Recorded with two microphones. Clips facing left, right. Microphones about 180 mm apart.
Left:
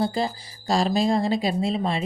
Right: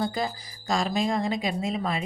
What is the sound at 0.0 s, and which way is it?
Speech, 30° left (ahead or behind).